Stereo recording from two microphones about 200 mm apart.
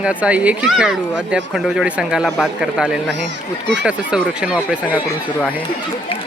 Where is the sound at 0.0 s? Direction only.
5° right (ahead or behind).